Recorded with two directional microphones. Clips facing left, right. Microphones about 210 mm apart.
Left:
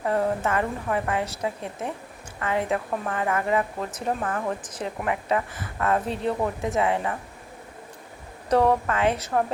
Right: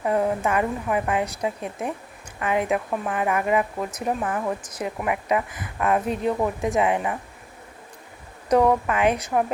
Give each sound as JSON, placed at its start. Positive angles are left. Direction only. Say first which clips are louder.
{"t": 0.0, "sound": "speech", "louder": "right 2 dB", "side_deg": -15}
{"t": 8.4, "sound": "speech", "louder": "right 2 dB", "side_deg": -15}